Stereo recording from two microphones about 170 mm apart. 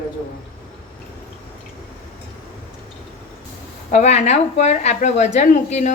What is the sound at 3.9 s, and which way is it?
Speech, 40° left (ahead or behind).